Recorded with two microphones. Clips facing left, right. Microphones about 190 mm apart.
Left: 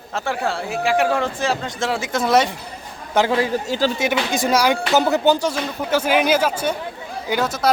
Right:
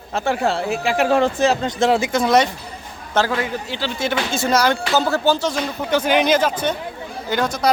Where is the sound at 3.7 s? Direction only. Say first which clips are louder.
Left 6 dB; 40° left (ahead or behind).